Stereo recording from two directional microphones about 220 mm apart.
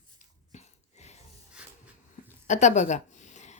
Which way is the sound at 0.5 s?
30° left (ahead or behind).